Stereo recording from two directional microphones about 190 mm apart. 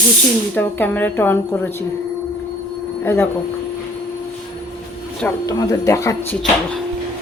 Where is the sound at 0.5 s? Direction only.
10° left (ahead or behind).